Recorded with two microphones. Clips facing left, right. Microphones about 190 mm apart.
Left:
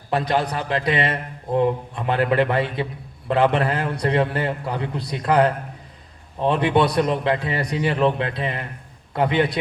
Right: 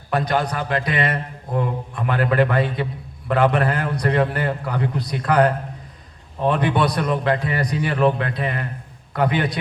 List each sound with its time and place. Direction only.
0.1 s a man's voice: 30° left (ahead or behind)